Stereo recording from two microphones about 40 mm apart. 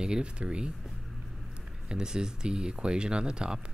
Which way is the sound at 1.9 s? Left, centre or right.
Centre.